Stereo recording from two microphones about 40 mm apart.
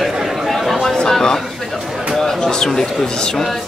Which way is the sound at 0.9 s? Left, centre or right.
Centre.